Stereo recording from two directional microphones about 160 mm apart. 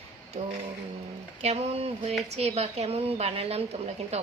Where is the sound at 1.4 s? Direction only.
40° right (ahead or behind).